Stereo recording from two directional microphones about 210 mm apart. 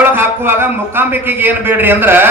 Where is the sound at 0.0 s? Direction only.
10° right (ahead or behind).